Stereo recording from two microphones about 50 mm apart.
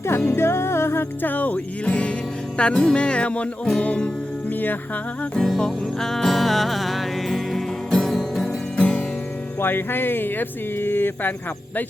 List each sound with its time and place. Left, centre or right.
0.3 s music: left
1.2 s music: left
4.4 s music: left
5.5 s music: centre
8.7 s music: left
9.6 s speech: left